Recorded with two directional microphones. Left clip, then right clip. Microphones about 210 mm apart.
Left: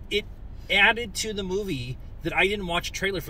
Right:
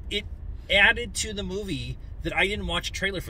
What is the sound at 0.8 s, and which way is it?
Speech, 15° right (ahead or behind).